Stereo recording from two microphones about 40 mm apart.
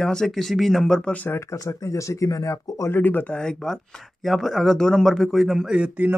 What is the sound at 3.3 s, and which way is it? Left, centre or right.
Speech, centre.